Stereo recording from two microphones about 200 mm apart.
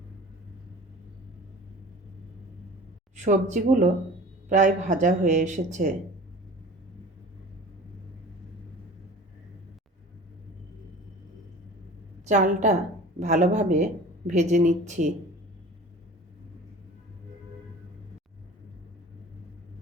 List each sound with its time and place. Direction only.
3.2 s speech: 40° right (ahead or behind)
12.2 s a woman's voice: 35° right (ahead or behind)